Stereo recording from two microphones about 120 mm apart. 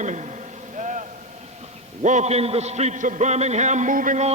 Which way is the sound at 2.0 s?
85° right.